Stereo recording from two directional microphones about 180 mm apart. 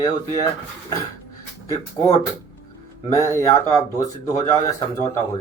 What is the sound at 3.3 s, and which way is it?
Speech, 15° left (ahead or behind).